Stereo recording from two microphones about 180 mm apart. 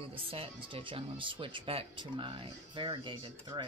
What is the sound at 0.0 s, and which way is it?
Speech, 30° right (ahead or behind).